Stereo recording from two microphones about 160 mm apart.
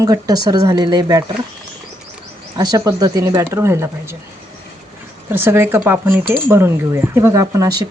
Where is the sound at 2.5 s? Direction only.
25° right (ahead or behind).